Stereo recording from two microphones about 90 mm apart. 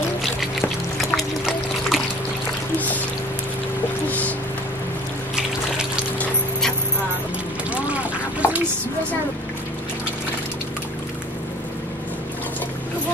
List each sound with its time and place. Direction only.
0.2 s pour: centre (ahead or behind)
1.1 s trickle: centre (ahead or behind)
7.7 s a sound: 15° right (ahead or behind)